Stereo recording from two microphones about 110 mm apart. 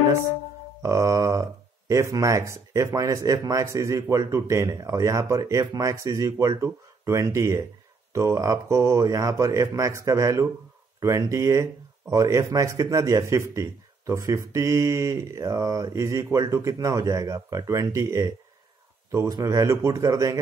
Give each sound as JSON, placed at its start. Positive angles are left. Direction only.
{"t": 0.8, "sound": "speech", "side_deg": -30}